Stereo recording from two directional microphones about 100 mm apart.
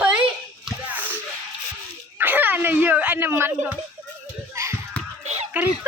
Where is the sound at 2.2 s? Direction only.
20° right (ahead or behind).